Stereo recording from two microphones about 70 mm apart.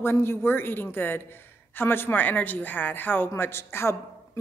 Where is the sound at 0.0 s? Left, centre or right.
Left.